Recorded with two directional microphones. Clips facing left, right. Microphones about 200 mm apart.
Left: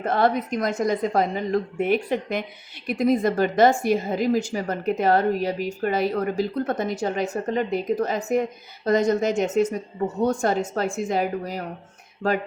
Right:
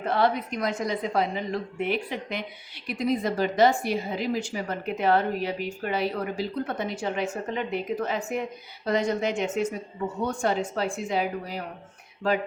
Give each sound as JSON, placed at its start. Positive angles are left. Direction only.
{"t": 0.0, "sound": "a woman's voice", "side_deg": 45}